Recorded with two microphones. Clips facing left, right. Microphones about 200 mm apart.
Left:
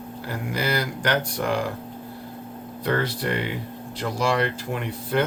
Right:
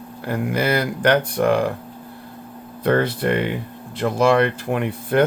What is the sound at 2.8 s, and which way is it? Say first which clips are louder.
Speech: right 6 dB; 55° right (ahead or behind).